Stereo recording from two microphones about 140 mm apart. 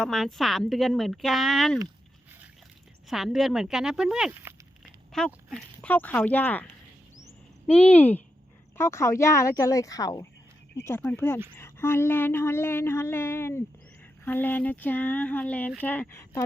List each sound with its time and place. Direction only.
0.0 s a woman's voice: centre (ahead or behind)
3.1 s a woman's voice: centre (ahead or behind)
7.7 s speech: 10° left (ahead or behind)
10.8 s speech: 15° left (ahead or behind)